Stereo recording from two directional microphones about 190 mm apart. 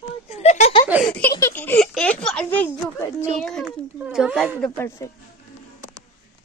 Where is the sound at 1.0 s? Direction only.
5° left (ahead or behind).